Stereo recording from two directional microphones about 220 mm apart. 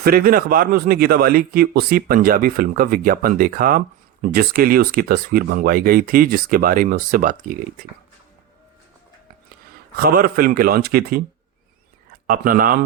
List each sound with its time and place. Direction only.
0.0 s speech: 40° right (ahead or behind)
10.0 s speech: 40° right (ahead or behind)
12.3 s speech: 40° right (ahead or behind)